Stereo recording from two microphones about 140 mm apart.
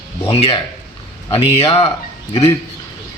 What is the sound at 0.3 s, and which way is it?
Speech, 40° left (ahead or behind).